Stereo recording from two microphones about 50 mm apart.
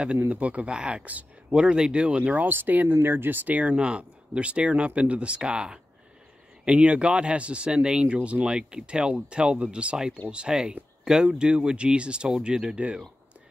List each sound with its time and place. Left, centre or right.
0.3 s speech: right
2.4 s speech: right
3.5 s speech: right